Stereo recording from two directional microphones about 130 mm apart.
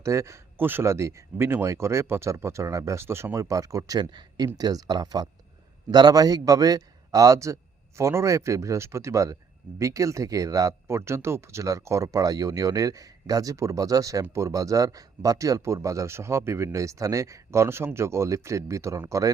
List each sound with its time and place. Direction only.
0.0 s a man's voice: 20° right (ahead or behind)